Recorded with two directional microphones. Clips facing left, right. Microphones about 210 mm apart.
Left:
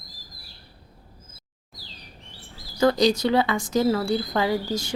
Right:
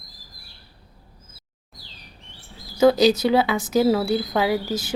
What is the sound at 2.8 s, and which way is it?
Speech, 5° right (ahead or behind).